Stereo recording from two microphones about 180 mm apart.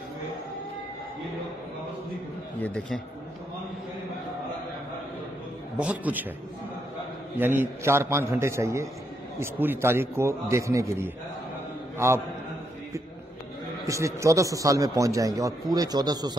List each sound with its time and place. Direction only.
2.6 s a man's voice: 5° left (ahead or behind)
5.8 s a man's voice: 10° right (ahead or behind)
7.3 s a man's voice: 10° right (ahead or behind)
13.8 s a man's voice: 15° right (ahead or behind)